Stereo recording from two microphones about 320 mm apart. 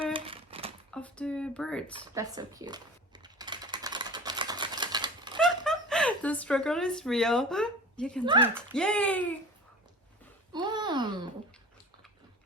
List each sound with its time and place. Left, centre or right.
0.0 s typewriter: centre
0.9 s speech: centre
2.1 s speech: centre
3.2 s typewriter: centre
5.4 s speech: centre
10.5 s a sound: centre